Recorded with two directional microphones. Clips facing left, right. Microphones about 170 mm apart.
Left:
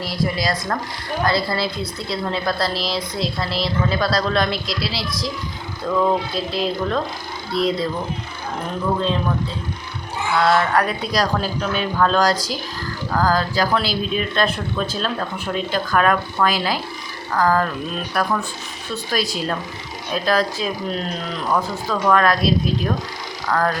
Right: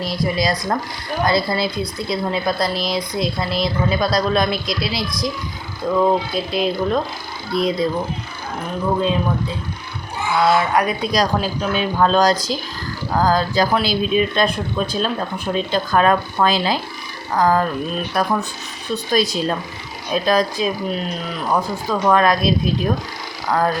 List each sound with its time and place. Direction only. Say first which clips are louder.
0.0 s speech: right 2 dB; 20° right (ahead or behind)
10.4 s speech: right 1 dB; 10° right (ahead or behind)